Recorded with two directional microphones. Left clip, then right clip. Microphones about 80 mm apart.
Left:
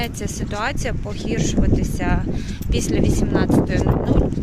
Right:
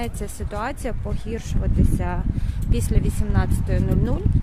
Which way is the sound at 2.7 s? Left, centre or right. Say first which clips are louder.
Left 8 dB; right.